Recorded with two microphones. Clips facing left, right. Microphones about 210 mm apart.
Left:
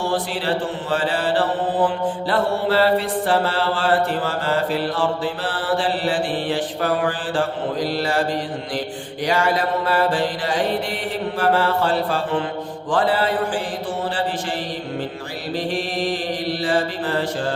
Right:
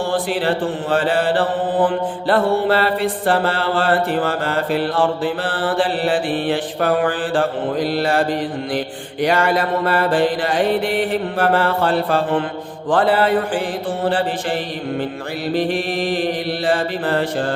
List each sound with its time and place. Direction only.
0.1 s mantra: 55° right (ahead or behind)
9.2 s mantra: 60° right (ahead or behind)
16.6 s mantra: 60° right (ahead or behind)